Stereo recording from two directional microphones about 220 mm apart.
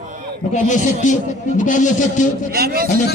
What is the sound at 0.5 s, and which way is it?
A man's voice, 35° left (ahead or behind).